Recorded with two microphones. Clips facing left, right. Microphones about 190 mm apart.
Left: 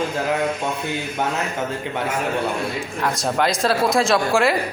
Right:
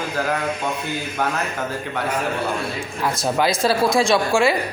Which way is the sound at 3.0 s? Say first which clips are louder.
Right 1 dB; centre (ahead or behind).